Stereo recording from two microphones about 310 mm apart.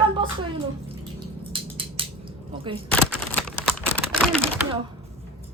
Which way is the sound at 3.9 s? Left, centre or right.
Centre.